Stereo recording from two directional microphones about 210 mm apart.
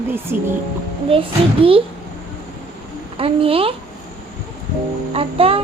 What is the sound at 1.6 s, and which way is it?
Speech, 25° right (ahead or behind).